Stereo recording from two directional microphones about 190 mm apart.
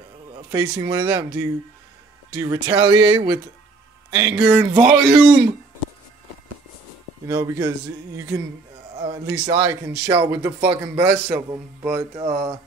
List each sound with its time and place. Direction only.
0.5 s a man's voice: 20° right (ahead or behind)
7.2 s a man's voice: 15° right (ahead or behind)
9.0 s a man's voice: 20° right (ahead or behind)